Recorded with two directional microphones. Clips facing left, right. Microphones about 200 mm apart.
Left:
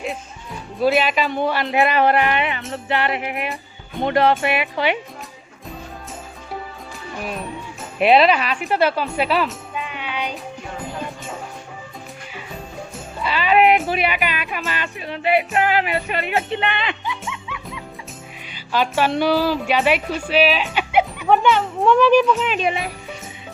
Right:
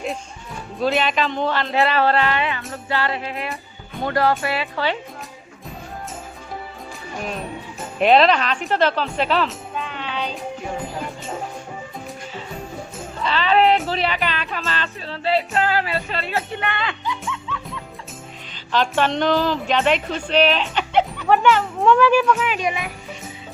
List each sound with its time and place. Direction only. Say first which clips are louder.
0.8 s speech: left 2 dB; 5° left (ahead or behind)
7.9 s speech: even; 5° left (ahead or behind)
13.2 s speech: left 1 dB; 10° left (ahead or behind)
22.5 s speech: left 2 dB; 30° left (ahead or behind)